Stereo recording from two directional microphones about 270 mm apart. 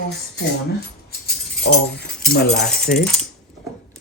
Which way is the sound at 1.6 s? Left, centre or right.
Left.